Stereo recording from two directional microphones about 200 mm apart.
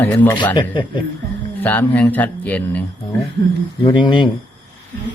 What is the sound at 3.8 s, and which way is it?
Speech, 25° left (ahead or behind).